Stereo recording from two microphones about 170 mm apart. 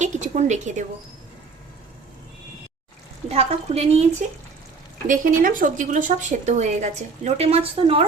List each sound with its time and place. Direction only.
0.0 s a woman's voice: 45° right (ahead or behind)
3.2 s speech: 35° right (ahead or behind)
5.0 s a woman's voice: 50° right (ahead or behind); by 8.0 s 35° right (ahead or behind)